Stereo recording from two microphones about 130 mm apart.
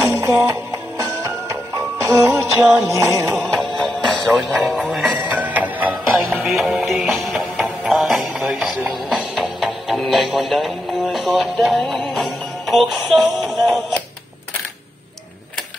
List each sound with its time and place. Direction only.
0.0 s music: 20° right (ahead or behind)
3.7 s music: centre (ahead or behind)
4.5 s speech: 10° right (ahead or behind)
4.8 s music: centre (ahead or behind)
5.1 s music: 10° right (ahead or behind)
6.1 s music: centre (ahead or behind)
6.5 s music: 10° right (ahead or behind)
7.2 s music: centre (ahead or behind)